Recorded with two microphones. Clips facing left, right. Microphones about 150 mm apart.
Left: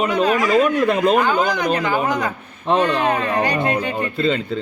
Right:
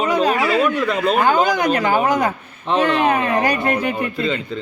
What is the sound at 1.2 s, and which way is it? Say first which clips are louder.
Speech: right 2 dB; 45° right (ahead or behind).